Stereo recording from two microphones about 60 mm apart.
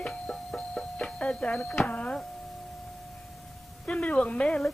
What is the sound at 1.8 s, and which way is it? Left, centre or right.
Speech, left.